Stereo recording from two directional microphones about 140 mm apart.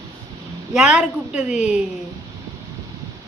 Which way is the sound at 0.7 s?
5° right (ahead or behind).